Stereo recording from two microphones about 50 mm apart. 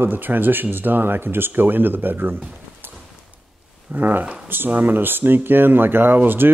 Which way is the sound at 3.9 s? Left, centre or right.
Right.